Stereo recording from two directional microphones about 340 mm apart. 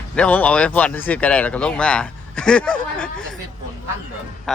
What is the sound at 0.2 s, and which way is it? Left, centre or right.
Speech, centre.